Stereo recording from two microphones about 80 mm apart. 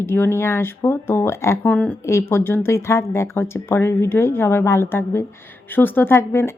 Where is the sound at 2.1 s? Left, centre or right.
Left.